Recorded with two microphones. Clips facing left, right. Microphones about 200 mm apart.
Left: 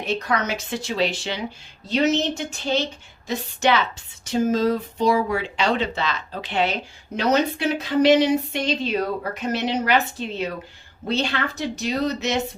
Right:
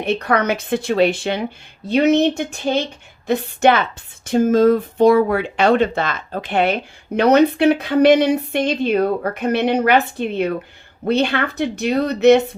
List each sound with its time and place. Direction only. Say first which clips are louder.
0.0 s a woman's voice: right 6 dB; 60° right (ahead or behind)